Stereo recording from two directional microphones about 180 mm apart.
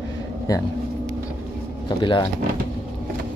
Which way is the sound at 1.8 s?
25° left (ahead or behind).